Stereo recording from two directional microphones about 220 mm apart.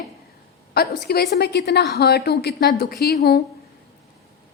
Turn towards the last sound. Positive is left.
turn(degrees=45)  # may be behind; listen again after turning